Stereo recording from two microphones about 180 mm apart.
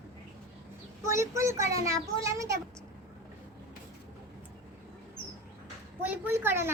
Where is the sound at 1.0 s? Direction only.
15° right (ahead or behind).